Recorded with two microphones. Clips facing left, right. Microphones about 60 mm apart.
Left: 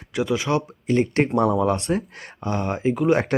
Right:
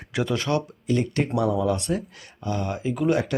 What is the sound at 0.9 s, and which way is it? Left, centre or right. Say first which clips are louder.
Speech: left 4 dB; left.